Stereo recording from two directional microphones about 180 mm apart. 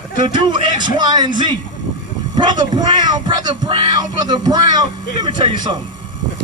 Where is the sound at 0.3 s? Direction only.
25° right (ahead or behind).